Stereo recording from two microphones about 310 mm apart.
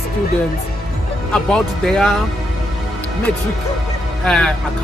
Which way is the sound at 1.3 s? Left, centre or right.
Centre.